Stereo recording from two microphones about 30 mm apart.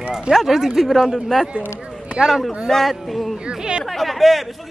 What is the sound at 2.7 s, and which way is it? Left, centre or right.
Speech, centre.